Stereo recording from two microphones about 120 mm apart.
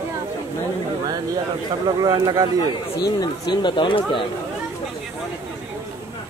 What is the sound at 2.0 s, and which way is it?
Speech, 30° right (ahead or behind).